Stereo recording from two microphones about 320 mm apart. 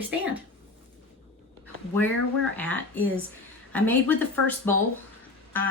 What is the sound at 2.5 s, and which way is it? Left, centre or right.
Speech, centre.